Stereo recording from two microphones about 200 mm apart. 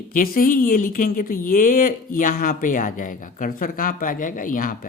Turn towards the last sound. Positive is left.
turn(degrees=40)  # may be behind; listen again after turning